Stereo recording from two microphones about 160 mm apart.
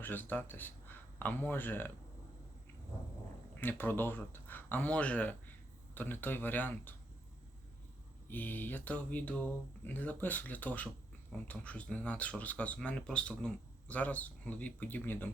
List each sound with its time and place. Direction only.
0.0 s speech: 10° left (ahead or behind)
3.6 s speech: 10° left (ahead or behind)
8.3 s speech: 10° left (ahead or behind)